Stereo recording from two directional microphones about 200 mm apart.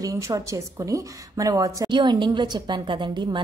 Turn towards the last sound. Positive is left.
turn(degrees=-25)  # may be behind; listen again after turning